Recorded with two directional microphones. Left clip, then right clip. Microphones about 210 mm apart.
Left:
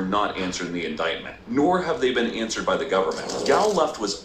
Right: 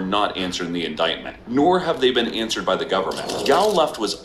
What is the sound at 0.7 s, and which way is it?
A man's voice, 30° right (ahead or behind).